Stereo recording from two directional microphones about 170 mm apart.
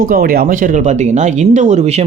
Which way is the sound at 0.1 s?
60° right (ahead or behind).